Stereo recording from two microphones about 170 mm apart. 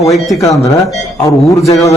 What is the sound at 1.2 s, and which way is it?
Speech, 20° left (ahead or behind).